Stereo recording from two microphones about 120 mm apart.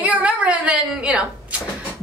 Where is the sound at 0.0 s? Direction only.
10° right (ahead or behind).